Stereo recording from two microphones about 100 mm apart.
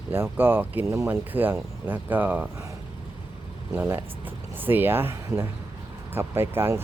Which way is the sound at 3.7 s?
20° right (ahead or behind).